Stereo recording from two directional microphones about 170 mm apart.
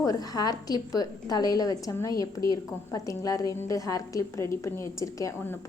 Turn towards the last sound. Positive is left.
turn(degrees=20)  # may be behind; listen again after turning